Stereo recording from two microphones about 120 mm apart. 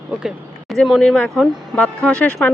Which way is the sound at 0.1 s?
5° right (ahead or behind).